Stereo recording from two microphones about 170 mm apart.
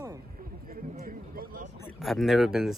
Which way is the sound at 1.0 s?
55° right (ahead or behind).